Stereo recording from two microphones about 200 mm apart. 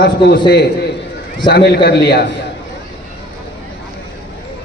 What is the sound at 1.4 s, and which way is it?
Speech, 55° left (ahead or behind).